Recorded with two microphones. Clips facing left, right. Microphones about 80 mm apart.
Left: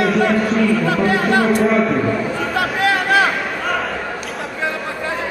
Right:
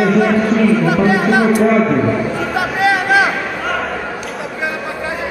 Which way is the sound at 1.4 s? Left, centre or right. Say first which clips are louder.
Right 3 dB; centre.